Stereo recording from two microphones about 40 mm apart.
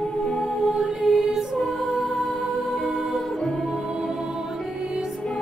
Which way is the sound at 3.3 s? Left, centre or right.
Centre.